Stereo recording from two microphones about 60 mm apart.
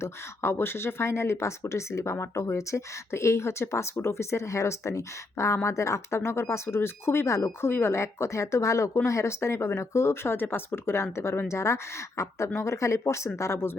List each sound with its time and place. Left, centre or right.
0.0 s speech: left